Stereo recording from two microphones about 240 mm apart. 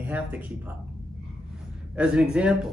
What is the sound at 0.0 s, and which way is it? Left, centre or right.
Speech, centre.